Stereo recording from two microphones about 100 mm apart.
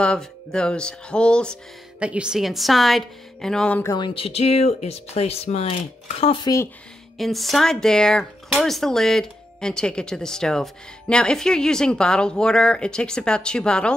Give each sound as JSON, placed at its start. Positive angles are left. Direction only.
{"t": 0.0, "sound": "speech", "side_deg": 10}
{"t": 2.0, "sound": "a woman's voice", "side_deg": -10}
{"t": 4.1, "sound": "speech", "side_deg": 80}
{"t": 7.2, "sound": "speech", "side_deg": 0}